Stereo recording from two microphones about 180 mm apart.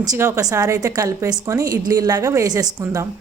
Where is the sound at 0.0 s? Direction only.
15° right (ahead or behind).